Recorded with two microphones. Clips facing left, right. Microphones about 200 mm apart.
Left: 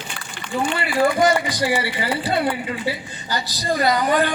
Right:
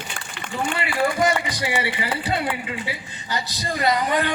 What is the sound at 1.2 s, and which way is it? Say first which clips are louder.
Speech: left 4 dB; 30° left (ahead or behind).